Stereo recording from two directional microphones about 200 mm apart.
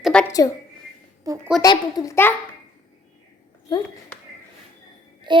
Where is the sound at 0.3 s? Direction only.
15° left (ahead or behind).